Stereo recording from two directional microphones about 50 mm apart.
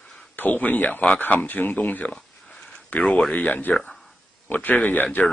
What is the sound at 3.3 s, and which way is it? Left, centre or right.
Speech, left.